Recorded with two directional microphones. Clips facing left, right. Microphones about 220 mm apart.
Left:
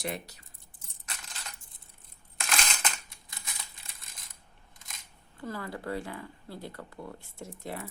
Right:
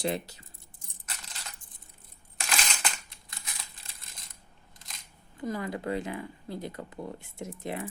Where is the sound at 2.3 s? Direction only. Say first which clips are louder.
Even; centre (ahead or behind).